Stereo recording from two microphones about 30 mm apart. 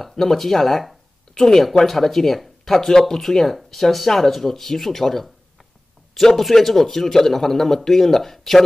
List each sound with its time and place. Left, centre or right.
0.0 s speech: centre
1.3 s speech: centre